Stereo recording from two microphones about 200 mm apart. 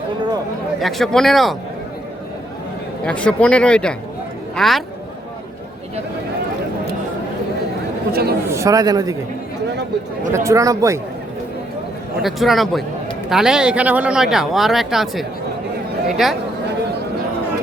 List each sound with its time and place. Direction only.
0.8 s speech: centre (ahead or behind)
3.0 s speech: 5° left (ahead or behind)
8.1 s a man's voice: 50° right (ahead or behind)
8.4 s a man's voice: 15° right (ahead or behind)
10.3 s a man's voice: 15° right (ahead or behind)
12.2 s speech: centre (ahead or behind)